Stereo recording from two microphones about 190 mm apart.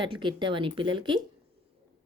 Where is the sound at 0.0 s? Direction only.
25° right (ahead or behind).